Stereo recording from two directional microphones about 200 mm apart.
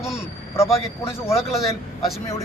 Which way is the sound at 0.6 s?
15° left (ahead or behind).